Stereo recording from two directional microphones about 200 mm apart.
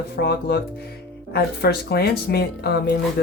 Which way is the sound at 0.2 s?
55° left (ahead or behind).